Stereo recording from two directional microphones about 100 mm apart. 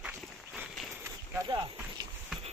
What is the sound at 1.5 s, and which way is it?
Speech, 45° right (ahead or behind).